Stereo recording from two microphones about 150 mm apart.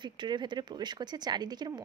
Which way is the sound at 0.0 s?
30° right (ahead or behind).